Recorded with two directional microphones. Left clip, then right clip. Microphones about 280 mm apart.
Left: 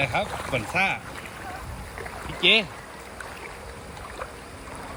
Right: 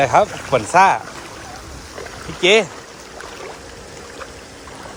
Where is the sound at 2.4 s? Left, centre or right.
Right.